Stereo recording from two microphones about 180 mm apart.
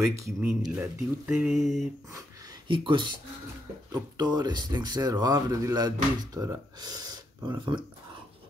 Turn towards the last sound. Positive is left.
turn(degrees=-20)  # may be behind; listen again after turning